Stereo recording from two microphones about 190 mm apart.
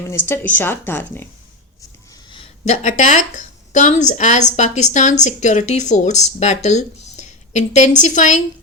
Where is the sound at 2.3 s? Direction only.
35° left (ahead or behind).